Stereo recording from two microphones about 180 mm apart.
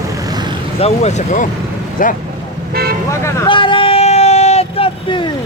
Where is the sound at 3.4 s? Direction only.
30° left (ahead or behind).